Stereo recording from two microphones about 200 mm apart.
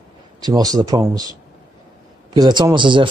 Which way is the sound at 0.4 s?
20° right (ahead or behind).